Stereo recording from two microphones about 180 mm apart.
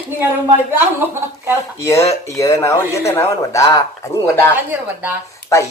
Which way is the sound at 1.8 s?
15° left (ahead or behind).